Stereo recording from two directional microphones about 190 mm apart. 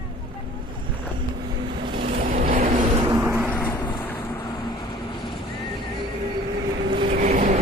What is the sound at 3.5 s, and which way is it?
Vehicle, 10° left (ahead or behind).